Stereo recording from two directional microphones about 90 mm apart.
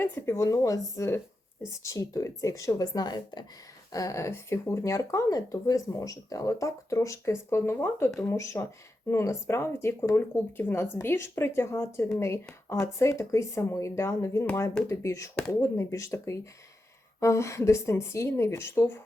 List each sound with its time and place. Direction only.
0.0 s speech: 25° left (ahead or behind)
0.3 s speech: 35° left (ahead or behind)
3.9 s speech: 35° left (ahead or behind)